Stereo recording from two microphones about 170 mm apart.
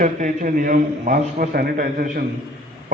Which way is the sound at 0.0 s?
50° right (ahead or behind).